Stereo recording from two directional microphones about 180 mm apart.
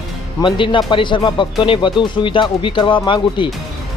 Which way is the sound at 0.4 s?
25° left (ahead or behind).